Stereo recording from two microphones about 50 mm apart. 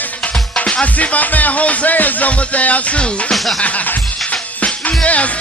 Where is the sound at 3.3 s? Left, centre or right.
Centre.